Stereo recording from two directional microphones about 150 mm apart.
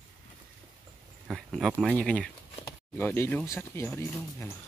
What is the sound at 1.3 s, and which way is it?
Speech, centre (ahead or behind).